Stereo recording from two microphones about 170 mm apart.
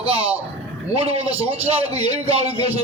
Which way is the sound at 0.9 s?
35° right (ahead or behind).